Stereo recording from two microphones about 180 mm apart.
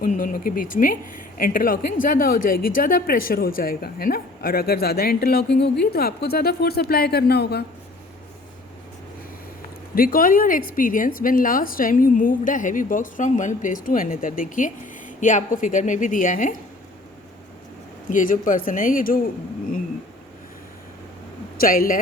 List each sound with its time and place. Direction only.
0.0 s a woman's voice: 50° left (ahead or behind); by 7.6 s 65° left (ahead or behind)
9.9 s a woman's voice: 55° left (ahead or behind)
18.1 s a woman's voice: 45° left (ahead or behind)
21.6 s a woman's voice: 50° left (ahead or behind)